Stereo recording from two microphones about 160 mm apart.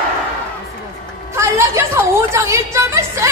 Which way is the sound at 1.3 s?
15° right (ahead or behind).